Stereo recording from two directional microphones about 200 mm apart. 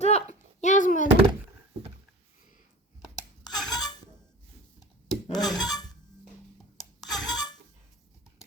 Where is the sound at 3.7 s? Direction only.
20° left (ahead or behind).